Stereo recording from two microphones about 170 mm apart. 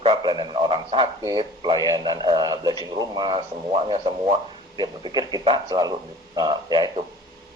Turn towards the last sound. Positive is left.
turn(degrees=-25)  # may be behind; listen again after turning